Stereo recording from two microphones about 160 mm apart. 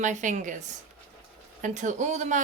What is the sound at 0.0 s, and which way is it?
Speech, 50° right (ahead or behind).